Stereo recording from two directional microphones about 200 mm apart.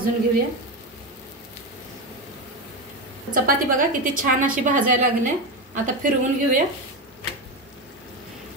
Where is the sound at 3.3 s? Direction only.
40° right (ahead or behind).